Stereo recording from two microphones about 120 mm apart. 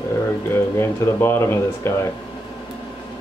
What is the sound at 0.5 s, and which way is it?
Speech, 20° left (ahead or behind).